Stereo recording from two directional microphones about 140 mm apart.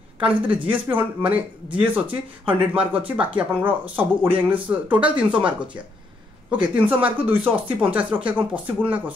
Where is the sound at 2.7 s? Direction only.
10° right (ahead or behind).